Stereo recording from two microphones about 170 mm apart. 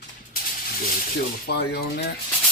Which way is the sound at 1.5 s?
75° left (ahead or behind).